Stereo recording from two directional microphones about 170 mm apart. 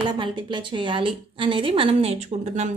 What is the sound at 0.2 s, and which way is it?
A woman's voice, 25° right (ahead or behind).